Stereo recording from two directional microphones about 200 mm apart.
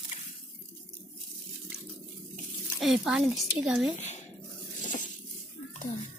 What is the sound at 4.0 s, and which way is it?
Dishes, 35° left (ahead or behind).